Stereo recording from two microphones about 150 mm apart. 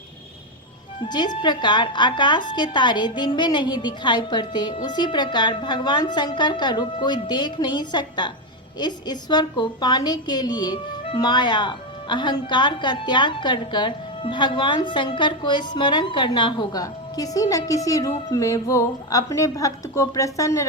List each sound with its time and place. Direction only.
1.0 s a woman's voice: 30° left (ahead or behind)